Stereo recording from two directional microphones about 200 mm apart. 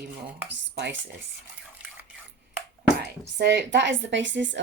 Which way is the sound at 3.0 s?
55° right (ahead or behind).